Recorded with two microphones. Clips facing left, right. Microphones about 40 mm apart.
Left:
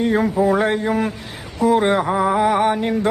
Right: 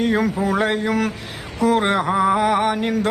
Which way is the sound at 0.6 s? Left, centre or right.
Right.